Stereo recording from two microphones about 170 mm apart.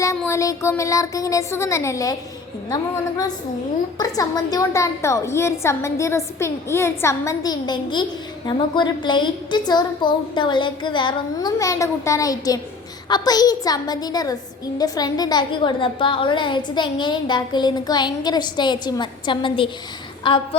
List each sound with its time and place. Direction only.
0.2 s a woman's voice: 15° left (ahead or behind)